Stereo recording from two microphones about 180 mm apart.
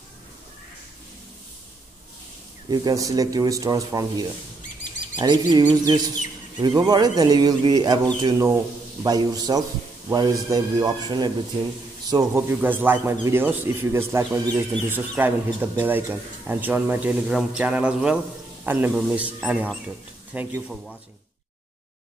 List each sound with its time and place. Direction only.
2.7 s a man's voice: 20° right (ahead or behind); by 21.0 s centre (ahead or behind)